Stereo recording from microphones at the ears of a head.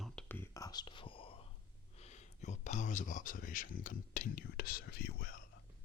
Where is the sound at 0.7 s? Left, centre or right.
Left.